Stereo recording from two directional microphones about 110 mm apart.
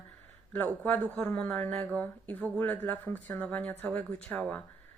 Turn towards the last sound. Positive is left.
turn(degrees=10)  # may be behind; listen again after turning